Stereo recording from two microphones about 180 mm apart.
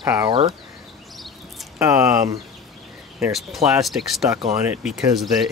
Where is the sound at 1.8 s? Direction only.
15° right (ahead or behind).